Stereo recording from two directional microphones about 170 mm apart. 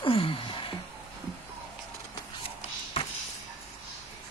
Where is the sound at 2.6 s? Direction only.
35° left (ahead or behind).